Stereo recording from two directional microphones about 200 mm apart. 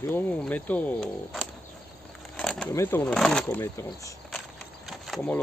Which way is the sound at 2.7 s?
10° left (ahead or behind).